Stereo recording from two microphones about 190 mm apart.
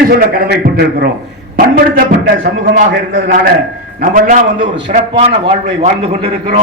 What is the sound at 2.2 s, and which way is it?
A man's voice, 50° right (ahead or behind).